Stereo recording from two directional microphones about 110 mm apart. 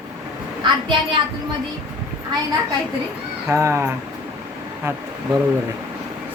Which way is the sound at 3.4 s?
25° right (ahead or behind).